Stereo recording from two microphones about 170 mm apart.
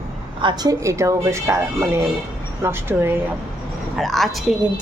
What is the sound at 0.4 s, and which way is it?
Speech, 25° right (ahead or behind).